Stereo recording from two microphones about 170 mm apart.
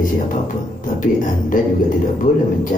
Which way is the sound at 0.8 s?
50° left (ahead or behind).